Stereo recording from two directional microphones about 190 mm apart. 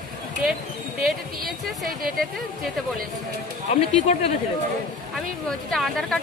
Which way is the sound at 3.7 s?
35° left (ahead or behind).